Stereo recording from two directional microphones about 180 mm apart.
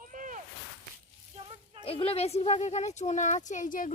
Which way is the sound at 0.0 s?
45° right (ahead or behind).